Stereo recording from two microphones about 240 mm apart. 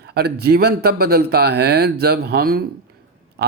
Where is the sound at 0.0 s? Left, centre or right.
Right.